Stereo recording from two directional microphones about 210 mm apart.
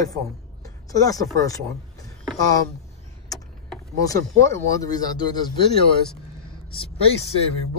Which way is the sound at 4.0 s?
15° left (ahead or behind).